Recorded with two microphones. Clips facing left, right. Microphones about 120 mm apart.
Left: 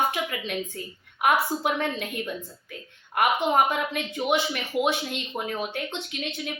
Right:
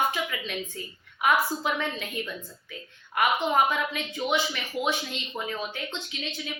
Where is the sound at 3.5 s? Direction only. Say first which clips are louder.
Left 2 dB; 50° left (ahead or behind).